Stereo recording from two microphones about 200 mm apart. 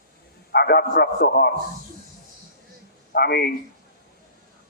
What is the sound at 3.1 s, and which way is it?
Speech, 55° left (ahead or behind).